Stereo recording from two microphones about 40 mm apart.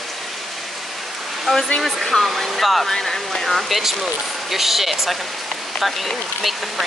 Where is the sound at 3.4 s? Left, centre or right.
Centre.